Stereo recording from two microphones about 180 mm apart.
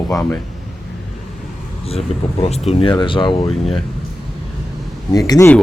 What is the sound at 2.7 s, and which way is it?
Speech, 30° left (ahead or behind).